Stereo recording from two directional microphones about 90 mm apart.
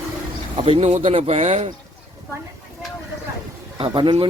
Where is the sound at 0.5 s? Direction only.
80° right.